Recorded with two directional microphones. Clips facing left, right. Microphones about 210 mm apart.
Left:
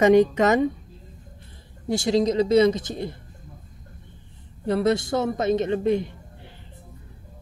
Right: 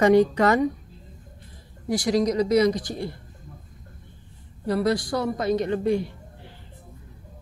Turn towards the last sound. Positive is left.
turn(degrees=20)  # may be behind; listen again after turning